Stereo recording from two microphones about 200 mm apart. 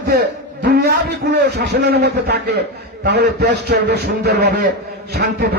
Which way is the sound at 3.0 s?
55° right (ahead or behind).